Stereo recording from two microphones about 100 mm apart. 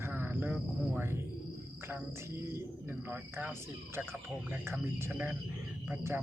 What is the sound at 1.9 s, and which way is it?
Speech, 25° right (ahead or behind).